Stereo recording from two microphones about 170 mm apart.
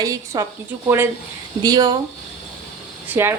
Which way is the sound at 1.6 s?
20° right (ahead or behind).